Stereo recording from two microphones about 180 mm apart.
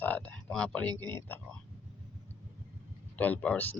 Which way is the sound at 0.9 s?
20° right (ahead or behind).